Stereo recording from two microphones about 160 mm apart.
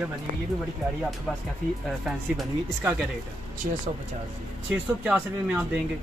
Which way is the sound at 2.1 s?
5° right (ahead or behind).